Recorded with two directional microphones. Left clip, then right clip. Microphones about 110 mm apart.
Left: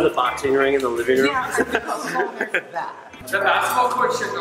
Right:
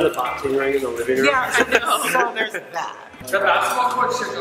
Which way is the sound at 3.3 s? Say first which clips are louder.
Right 1 dB; 10° left (ahead or behind).